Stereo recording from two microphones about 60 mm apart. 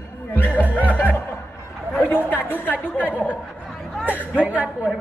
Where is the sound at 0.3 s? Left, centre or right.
Left.